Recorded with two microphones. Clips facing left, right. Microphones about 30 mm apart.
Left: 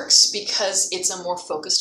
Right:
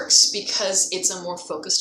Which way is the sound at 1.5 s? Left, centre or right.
Left.